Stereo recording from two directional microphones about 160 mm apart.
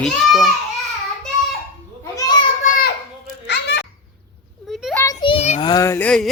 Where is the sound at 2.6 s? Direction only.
65° left (ahead or behind).